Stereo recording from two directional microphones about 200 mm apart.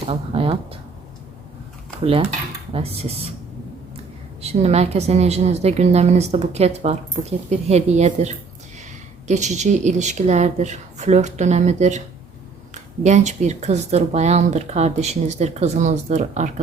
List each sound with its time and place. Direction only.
0.1 s speech: 30° right (ahead or behind)
2.0 s speech: 30° right (ahead or behind)
4.4 s a woman's voice: 30° right (ahead or behind)